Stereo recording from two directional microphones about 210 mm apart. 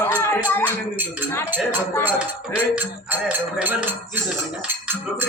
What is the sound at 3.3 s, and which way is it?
Speech, 10° right (ahead or behind).